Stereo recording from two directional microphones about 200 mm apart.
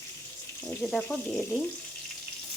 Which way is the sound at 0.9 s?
5° left (ahead or behind).